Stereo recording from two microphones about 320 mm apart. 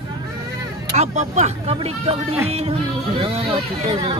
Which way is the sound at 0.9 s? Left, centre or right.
Right.